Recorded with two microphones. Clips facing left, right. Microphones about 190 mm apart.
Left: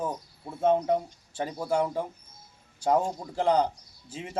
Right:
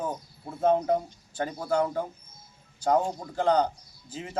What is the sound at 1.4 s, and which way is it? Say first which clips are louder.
A man's voice: right 1 dB; 10° left (ahead or behind).